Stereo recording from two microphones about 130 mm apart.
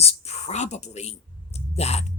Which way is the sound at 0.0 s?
55° left (ahead or behind).